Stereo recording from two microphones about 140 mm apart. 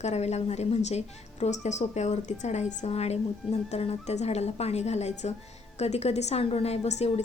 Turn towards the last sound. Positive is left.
turn(degrees=50)  # may be behind; listen again after turning